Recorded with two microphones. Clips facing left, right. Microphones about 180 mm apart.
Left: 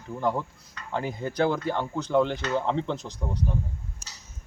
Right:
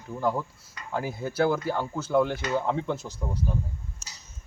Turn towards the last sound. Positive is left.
turn(degrees=-5)  # may be behind; listen again after turning